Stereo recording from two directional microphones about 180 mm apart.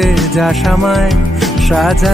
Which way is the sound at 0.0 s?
Centre (ahead or behind).